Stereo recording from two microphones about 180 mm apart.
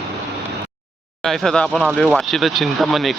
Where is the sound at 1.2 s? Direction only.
5° left (ahead or behind).